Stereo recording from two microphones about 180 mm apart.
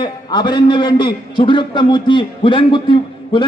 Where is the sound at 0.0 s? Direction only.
25° left (ahead or behind).